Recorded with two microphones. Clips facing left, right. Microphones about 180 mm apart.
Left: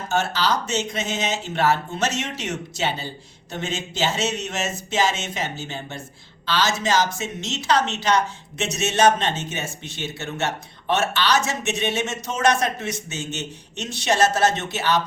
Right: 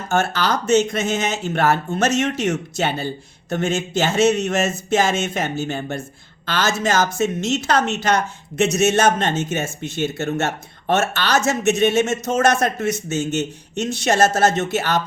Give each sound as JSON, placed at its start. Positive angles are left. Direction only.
{"t": 0.1, "sound": "speech", "side_deg": -50}